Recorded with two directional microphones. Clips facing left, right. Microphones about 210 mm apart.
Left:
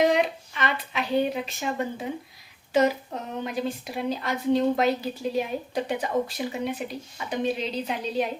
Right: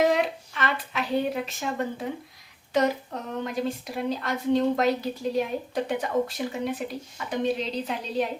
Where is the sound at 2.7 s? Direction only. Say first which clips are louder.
Left 2 dB; 5° left (ahead or behind).